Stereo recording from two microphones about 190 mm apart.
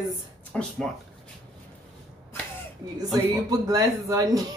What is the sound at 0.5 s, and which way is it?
Speech, 5° left (ahead or behind).